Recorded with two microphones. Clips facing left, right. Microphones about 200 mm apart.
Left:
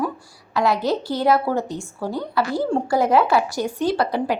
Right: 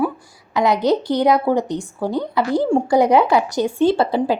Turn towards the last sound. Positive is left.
turn(degrees=-25)  # may be behind; listen again after turning